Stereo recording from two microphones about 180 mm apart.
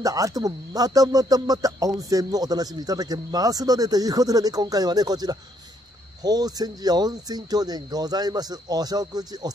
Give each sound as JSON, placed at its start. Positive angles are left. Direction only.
{"t": 0.0, "sound": "speech", "side_deg": -20}